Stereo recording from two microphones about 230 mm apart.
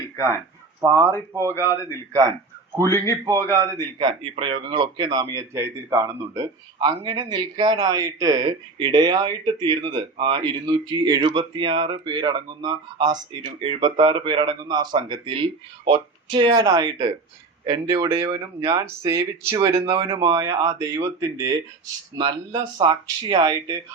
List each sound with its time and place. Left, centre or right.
0.8 s speech: centre
1.5 s a man's voice: centre
2.8 s a man's voice: centre
3.5 s speech: centre